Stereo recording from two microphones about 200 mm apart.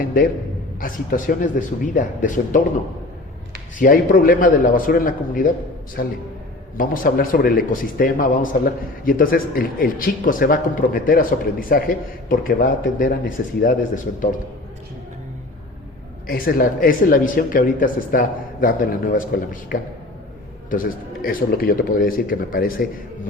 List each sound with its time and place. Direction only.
0.0 s a sound: 45° left (ahead or behind)
0.8 s speech: 45° left (ahead or behind)
3.8 s a man's voice: 45° left (ahead or behind)
16.2 s a man's voice: 45° left (ahead or behind)